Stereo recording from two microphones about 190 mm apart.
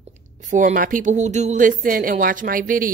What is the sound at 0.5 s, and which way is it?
Speech, 40° right (ahead or behind).